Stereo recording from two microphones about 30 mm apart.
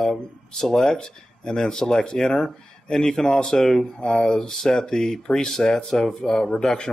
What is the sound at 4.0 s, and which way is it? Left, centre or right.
Speech, left.